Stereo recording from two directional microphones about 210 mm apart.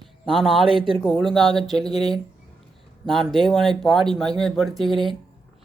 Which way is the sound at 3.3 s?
Centre (ahead or behind).